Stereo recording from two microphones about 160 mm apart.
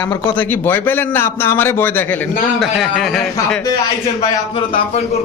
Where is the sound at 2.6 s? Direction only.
Centre (ahead or behind).